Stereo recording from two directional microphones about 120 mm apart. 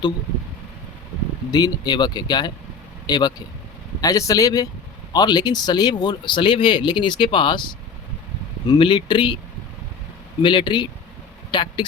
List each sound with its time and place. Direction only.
1.5 s speech: 35° left (ahead or behind)
10.4 s speech: 40° left (ahead or behind)